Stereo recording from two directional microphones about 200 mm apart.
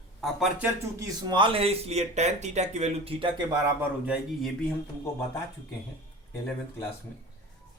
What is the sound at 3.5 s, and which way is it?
Speech, 10° right (ahead or behind).